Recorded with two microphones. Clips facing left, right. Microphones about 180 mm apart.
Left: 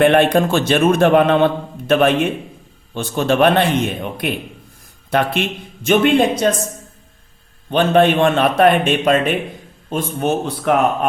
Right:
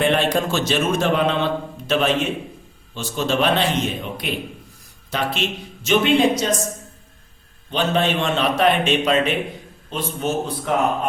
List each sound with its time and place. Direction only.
0.0 s speech: 60° left (ahead or behind)
7.7 s a man's voice: 55° left (ahead or behind)